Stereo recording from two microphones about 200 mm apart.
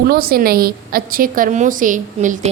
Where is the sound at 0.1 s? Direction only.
50° right (ahead or behind).